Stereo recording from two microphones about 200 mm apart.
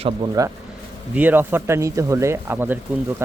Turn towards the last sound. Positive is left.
turn(degrees=-10)  # may be behind; listen again after turning